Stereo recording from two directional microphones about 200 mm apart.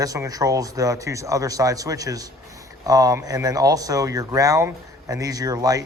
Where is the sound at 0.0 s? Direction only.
15° right (ahead or behind).